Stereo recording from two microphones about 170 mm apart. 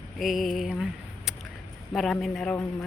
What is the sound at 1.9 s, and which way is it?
Speech, centre (ahead or behind).